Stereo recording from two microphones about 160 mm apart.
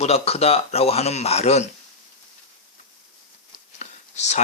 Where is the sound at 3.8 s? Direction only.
45° left (ahead or behind).